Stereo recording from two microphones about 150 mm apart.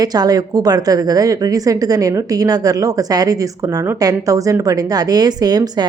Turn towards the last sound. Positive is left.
turn(degrees=-25)  # may be behind; listen again after turning